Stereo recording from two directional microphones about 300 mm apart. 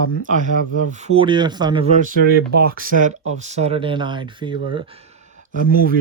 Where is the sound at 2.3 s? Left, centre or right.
Right.